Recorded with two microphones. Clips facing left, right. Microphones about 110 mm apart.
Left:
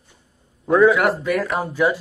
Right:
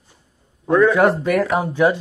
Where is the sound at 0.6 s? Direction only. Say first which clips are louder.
Left 1 dB; 5° left (ahead or behind).